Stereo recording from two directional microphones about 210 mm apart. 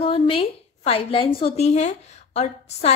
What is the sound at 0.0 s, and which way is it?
A woman's voice, 25° left (ahead or behind).